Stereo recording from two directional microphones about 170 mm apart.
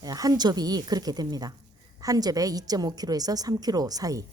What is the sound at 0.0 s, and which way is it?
Speech, 20° right (ahead or behind).